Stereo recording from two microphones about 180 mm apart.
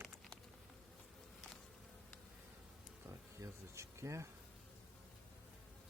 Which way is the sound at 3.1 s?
15° right (ahead or behind).